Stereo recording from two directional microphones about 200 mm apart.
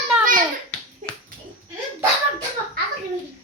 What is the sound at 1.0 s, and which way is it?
Dog, 35° right (ahead or behind).